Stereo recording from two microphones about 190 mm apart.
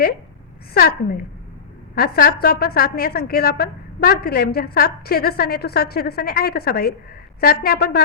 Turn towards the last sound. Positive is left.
turn(degrees=55)  # may be behind; listen again after turning